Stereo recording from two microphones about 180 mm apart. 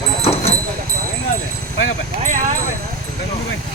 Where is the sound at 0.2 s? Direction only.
35° left (ahead or behind).